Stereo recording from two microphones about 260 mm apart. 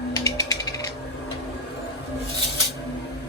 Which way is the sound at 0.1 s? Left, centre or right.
Centre.